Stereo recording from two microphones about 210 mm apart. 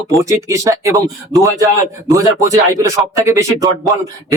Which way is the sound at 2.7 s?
15° right (ahead or behind).